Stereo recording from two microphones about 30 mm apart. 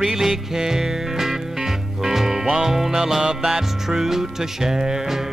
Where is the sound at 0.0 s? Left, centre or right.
Centre.